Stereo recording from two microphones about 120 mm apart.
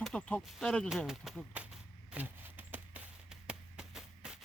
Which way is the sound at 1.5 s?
10° right (ahead or behind).